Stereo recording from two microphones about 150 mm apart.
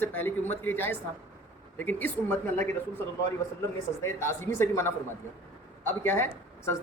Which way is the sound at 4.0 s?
20° left (ahead or behind).